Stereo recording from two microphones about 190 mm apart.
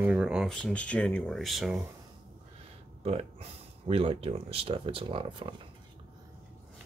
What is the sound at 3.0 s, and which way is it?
Speech, 35° right (ahead or behind).